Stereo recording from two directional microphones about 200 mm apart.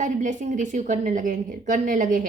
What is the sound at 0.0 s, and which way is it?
A woman's voice, 40° right (ahead or behind).